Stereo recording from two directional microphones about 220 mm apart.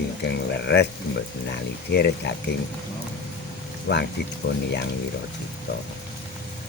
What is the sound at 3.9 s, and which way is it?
Speech, 50° left (ahead or behind).